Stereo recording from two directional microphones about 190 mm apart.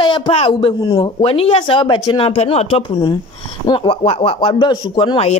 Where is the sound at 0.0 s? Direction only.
30° left (ahead or behind).